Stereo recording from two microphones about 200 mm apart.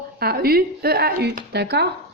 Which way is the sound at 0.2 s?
50° right (ahead or behind).